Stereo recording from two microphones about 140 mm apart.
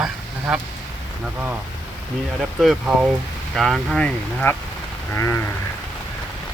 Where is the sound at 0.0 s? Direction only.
5° right (ahead or behind).